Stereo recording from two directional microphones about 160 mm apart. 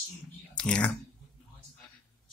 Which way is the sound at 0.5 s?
5° left (ahead or behind).